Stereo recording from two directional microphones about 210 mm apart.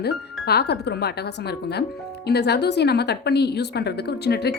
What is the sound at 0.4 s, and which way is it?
Speech, 50° left (ahead or behind).